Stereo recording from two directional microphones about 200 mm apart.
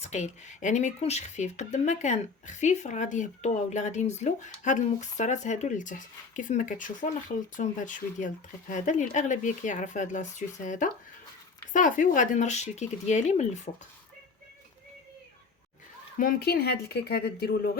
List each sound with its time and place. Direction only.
0.0 s speech: 35° left (ahead or behind)
16.1 s speech: 45° left (ahead or behind)